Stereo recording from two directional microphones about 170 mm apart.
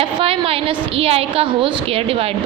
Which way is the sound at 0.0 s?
35° right (ahead or behind).